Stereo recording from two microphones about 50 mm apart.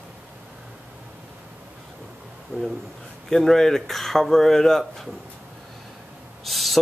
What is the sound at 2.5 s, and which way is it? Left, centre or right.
Speech, right.